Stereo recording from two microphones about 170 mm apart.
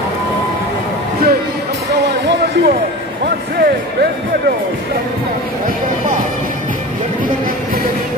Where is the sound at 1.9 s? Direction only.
80° right.